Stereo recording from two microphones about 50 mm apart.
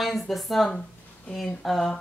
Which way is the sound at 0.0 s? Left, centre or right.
Centre.